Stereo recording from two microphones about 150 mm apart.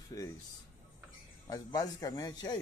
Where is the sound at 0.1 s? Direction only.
20° left (ahead or behind).